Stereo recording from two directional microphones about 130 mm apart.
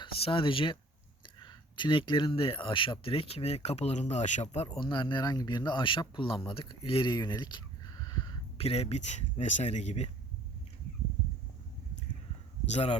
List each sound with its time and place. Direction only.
0.0 s speech: 40° left (ahead or behind)
4.8 s speech: 35° left (ahead or behind)
8.5 s speech: 50° left (ahead or behind)
12.7 s speech: 55° left (ahead or behind)